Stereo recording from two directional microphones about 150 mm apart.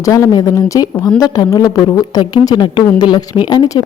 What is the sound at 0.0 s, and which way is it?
Speech, 20° left (ahead or behind).